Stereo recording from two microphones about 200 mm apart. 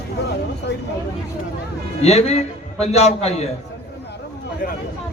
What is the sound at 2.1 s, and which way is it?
A man's voice, 30° left (ahead or behind).